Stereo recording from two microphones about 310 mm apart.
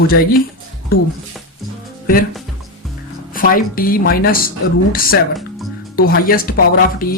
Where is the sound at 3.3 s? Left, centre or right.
Left.